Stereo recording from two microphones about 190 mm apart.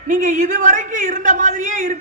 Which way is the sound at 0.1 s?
45° right (ahead or behind).